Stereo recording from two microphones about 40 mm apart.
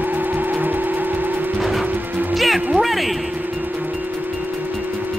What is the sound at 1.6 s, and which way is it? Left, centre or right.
Music, centre.